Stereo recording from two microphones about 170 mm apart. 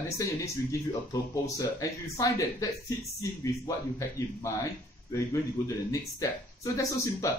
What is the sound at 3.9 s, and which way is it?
A man's voice, 15° left (ahead or behind).